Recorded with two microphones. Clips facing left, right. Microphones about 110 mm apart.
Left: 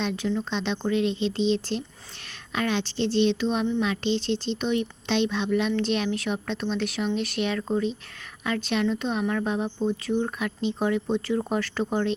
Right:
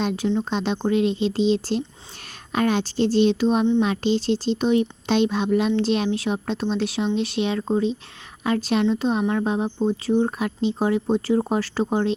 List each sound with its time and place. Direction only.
0.5 s speech: 40° right (ahead or behind)